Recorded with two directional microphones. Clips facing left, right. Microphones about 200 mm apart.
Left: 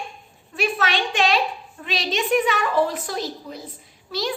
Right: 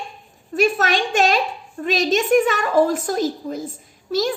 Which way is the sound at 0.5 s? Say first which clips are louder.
Right 5 dB; 45° right (ahead or behind).